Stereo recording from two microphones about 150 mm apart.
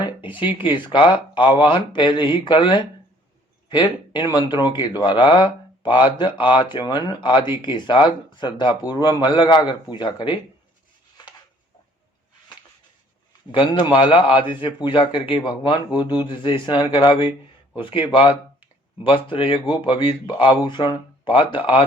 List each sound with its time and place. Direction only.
0.3 s speech: 35° left (ahead or behind)
4.1 s speech: 30° left (ahead or behind)
11.2 s a sound: 30° left (ahead or behind)
13.5 s speech: 35° left (ahead or behind)